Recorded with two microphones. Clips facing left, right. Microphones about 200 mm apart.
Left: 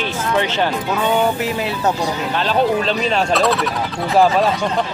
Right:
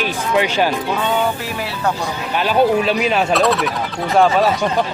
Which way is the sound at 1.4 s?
20° left (ahead or behind).